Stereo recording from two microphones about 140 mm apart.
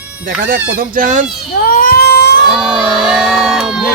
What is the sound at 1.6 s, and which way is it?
Baby cry, 90° left.